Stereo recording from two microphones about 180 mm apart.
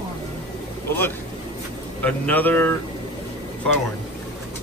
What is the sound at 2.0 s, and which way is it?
Speech, 10° left (ahead or behind).